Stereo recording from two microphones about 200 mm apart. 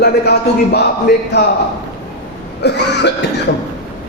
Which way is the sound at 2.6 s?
55° left (ahead or behind).